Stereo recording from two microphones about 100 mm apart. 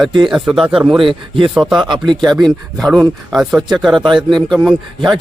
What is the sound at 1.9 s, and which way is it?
Speech, 50° right (ahead or behind).